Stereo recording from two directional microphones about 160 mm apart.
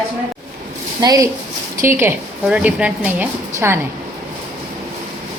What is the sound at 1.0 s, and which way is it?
A woman's voice, 25° right (ahead or behind).